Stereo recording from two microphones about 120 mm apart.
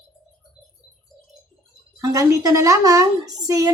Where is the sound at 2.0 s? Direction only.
30° right (ahead or behind).